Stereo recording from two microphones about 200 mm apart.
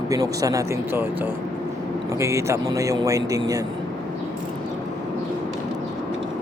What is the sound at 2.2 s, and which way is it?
Speech, 15° right (ahead or behind).